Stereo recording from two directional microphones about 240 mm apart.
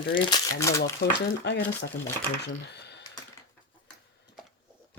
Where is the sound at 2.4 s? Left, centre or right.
Left.